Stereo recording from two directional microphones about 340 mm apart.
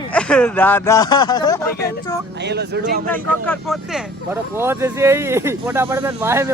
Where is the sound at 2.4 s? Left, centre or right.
Right.